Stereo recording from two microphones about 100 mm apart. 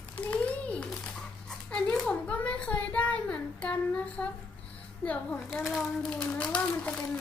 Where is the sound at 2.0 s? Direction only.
15° left (ahead or behind).